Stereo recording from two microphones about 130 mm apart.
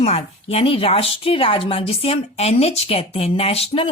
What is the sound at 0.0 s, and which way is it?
Speech, 50° left (ahead or behind).